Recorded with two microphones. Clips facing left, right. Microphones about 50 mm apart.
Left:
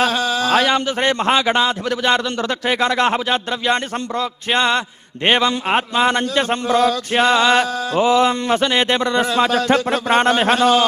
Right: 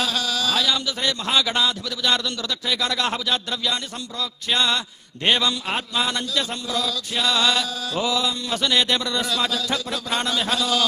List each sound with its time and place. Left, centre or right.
0.0 s a man's voice: left